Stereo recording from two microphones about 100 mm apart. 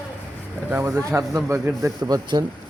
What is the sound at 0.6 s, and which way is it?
Speech, 20° right (ahead or behind).